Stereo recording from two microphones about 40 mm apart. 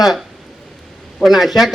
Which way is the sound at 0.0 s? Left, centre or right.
Centre.